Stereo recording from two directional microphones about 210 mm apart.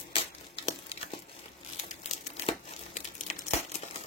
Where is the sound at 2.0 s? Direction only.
30° left (ahead or behind).